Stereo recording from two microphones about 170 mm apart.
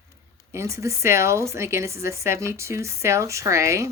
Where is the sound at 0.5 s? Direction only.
15° right (ahead or behind).